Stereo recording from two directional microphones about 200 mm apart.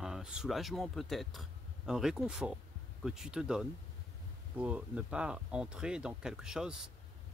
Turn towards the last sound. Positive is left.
turn(degrees=-5)  # may be behind; listen again after turning